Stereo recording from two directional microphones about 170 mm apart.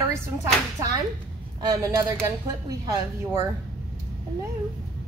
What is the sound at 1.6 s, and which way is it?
Speech, 25° right (ahead or behind).